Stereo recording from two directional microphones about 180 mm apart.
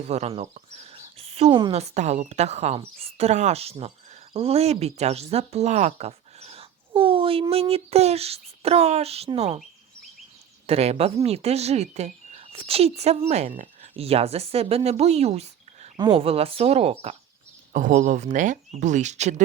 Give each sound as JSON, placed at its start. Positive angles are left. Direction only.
{"t": 0.1, "sound": "speech", "side_deg": -35}
{"t": 10.7, "sound": "speech", "side_deg": -35}
{"t": 17.7, "sound": "speech", "side_deg": -45}